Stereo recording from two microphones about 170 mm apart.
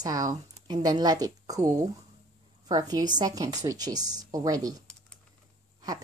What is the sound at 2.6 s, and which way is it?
Speech, 20° right (ahead or behind).